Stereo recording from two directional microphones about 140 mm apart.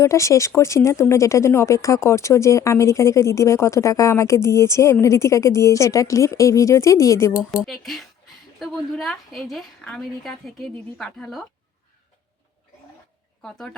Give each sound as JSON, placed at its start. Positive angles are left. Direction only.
{"t": 0.0, "sound": "speech", "side_deg": 20}
{"t": 7.6, "sound": "a woman's voice", "side_deg": 0}